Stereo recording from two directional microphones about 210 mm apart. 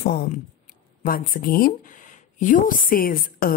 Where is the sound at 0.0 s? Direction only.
45° left (ahead or behind).